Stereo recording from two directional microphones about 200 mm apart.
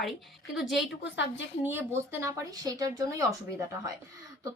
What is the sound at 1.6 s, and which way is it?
A woman's voice, 10° right (ahead or behind).